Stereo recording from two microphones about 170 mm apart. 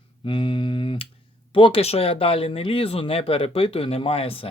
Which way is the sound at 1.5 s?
30° left (ahead or behind).